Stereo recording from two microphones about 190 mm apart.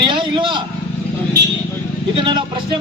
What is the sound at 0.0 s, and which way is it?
Vehicle, 25° right (ahead or behind).